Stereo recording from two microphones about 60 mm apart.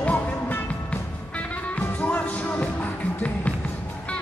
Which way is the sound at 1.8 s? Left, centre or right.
Left.